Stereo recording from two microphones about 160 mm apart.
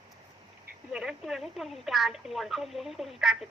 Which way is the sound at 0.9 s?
5° right (ahead or behind).